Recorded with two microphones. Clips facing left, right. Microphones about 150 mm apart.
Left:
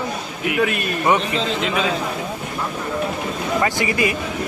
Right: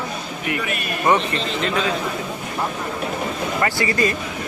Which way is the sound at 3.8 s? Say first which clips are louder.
Even; 15° left (ahead or behind).